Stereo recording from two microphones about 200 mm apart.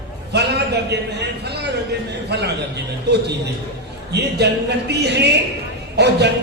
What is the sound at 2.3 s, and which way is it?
Speech, 55° right (ahead or behind).